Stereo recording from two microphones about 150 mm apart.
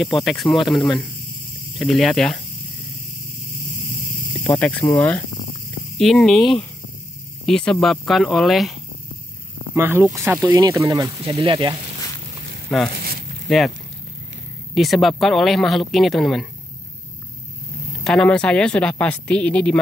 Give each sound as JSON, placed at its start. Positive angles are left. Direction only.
{"t": 0.0, "sound": "speech", "side_deg": 0}
{"t": 4.6, "sound": "speech", "side_deg": 10}
{"t": 9.8, "sound": "speech", "side_deg": -15}
{"t": 10.4, "sound": "speech", "side_deg": -25}
{"t": 12.6, "sound": "speech", "side_deg": 0}
{"t": 14.7, "sound": "speech", "side_deg": 0}
{"t": 18.0, "sound": "speech", "side_deg": 5}